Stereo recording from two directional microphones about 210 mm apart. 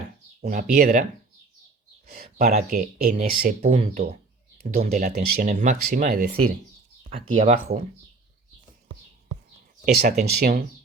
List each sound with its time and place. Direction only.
0.4 s speech: 35° right (ahead or behind)
2.0 s a sound: 45° right (ahead or behind)
2.6 s speech: 45° right (ahead or behind)
3.8 s speech: 30° right (ahead or behind)
9.9 s speech: 50° right (ahead or behind)